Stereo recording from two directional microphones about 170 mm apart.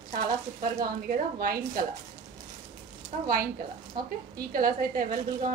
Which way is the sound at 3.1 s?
45° right (ahead or behind).